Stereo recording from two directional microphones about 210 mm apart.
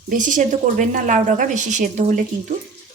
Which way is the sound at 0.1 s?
40° right (ahead or behind).